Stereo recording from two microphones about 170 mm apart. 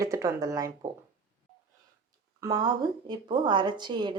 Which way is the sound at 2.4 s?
25° right (ahead or behind).